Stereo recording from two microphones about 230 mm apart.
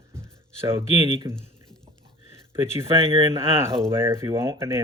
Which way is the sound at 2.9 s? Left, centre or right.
Right.